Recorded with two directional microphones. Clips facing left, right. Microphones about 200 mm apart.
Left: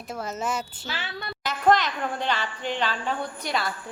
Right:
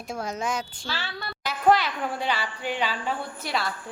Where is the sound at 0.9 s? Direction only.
20° left (ahead or behind).